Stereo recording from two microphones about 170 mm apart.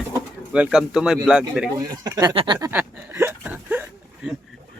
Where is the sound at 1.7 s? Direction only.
20° right (ahead or behind).